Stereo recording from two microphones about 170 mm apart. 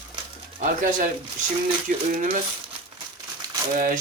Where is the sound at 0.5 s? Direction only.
55° right (ahead or behind).